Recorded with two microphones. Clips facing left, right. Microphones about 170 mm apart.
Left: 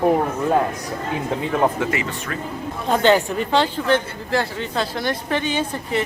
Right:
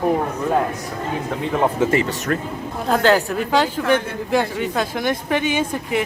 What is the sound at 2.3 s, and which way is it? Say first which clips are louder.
Speech: right 9 dB; 50° right (ahead or behind).